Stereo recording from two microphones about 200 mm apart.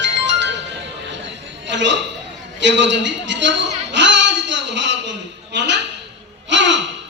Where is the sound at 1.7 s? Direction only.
65° right (ahead or behind).